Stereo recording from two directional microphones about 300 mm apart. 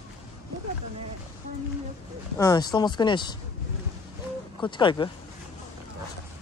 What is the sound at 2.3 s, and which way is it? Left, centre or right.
Speech, centre.